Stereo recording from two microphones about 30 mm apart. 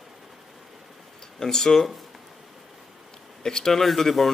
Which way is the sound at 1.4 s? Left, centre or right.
Centre.